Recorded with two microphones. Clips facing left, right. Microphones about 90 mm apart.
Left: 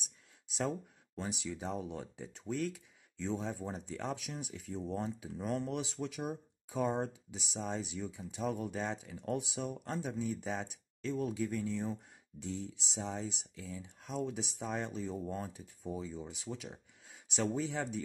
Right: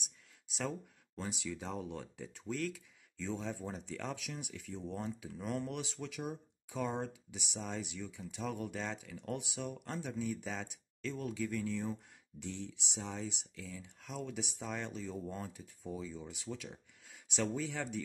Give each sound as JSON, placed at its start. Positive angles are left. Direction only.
{"t": 0.6, "sound": "speech", "side_deg": 25}